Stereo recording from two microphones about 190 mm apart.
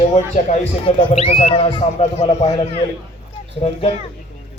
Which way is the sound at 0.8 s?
30° left (ahead or behind).